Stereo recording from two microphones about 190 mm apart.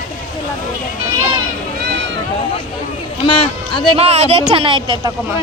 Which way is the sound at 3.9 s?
35° right (ahead or behind).